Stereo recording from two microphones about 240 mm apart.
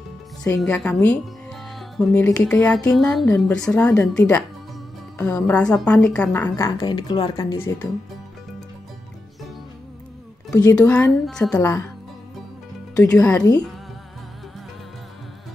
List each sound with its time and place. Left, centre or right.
0.4 s speech: centre
6.8 s speech: centre
10.5 s speech: centre
10.9 s speech: centre
12.9 s speech: centre